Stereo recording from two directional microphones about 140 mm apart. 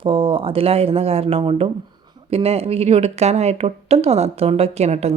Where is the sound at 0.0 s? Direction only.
40° right (ahead or behind).